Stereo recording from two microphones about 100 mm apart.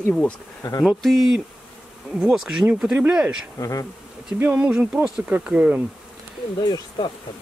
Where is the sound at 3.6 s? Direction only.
35° left (ahead or behind).